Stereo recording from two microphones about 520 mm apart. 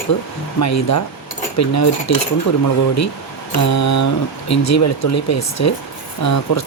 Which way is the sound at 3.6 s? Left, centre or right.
Left.